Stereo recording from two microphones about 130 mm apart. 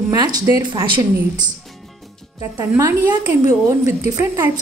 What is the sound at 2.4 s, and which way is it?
A woman's voice, 25° right (ahead or behind).